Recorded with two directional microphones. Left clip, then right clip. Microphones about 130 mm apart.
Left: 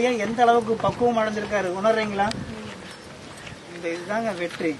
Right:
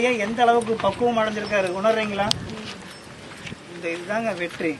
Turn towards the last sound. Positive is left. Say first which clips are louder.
# right 1 dB
turn(degrees=5)  # may be behind; listen again after turning